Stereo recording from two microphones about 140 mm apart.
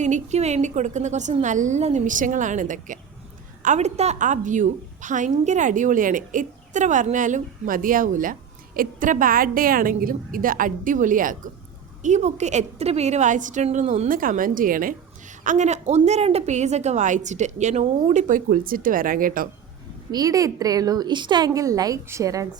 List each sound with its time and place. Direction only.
0.0 s a woman's voice: 55° right (ahead or behind); by 11.3 s 75° right (ahead or behind)
12.0 s a woman's voice: 55° right (ahead or behind)
14.1 s a woman's voice: 80° right
15.4 s a woman's voice: 55° right (ahead or behind); by 19.5 s 85° right
20.1 s a woman's voice: 25° right (ahead or behind)